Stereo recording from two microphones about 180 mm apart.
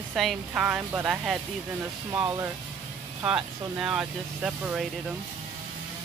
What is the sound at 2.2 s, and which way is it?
Speech, 20° right (ahead or behind).